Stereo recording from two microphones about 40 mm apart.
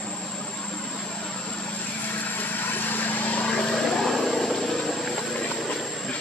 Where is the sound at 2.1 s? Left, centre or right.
Left.